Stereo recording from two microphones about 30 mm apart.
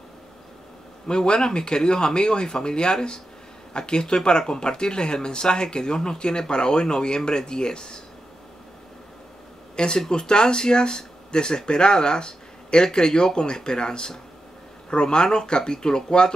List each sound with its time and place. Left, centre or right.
1.0 s speech: left
9.8 s speech: left